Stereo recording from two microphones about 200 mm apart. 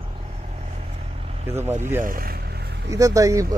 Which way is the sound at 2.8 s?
15° right (ahead or behind).